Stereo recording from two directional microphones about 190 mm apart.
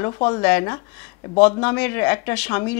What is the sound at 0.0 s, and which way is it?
Speech, 20° left (ahead or behind).